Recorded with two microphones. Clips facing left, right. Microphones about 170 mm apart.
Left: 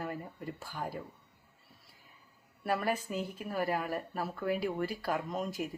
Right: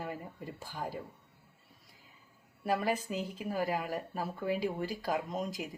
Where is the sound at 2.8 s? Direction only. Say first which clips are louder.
Even; 15° right (ahead or behind).